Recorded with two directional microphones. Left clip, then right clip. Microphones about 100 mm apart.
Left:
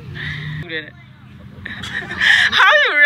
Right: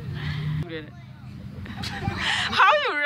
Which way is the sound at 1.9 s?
20° right (ahead or behind).